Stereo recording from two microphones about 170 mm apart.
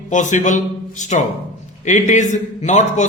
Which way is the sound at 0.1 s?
45° left (ahead or behind).